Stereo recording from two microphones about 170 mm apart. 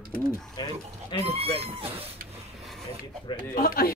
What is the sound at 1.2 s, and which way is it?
Speech, 35° right (ahead or behind).